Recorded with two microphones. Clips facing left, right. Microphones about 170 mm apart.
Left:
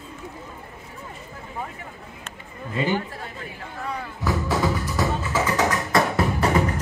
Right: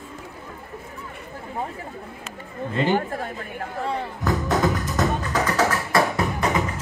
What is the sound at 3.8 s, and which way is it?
Speech, 30° right (ahead or behind).